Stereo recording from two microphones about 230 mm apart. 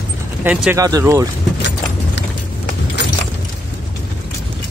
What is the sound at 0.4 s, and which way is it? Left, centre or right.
Speech, centre.